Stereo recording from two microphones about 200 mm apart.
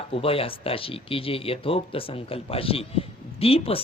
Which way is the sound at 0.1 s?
30° left (ahead or behind).